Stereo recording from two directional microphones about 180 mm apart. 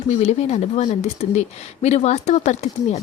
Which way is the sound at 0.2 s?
35° left (ahead or behind).